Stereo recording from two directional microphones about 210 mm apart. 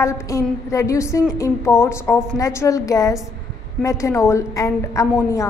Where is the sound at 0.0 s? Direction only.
15° left (ahead or behind).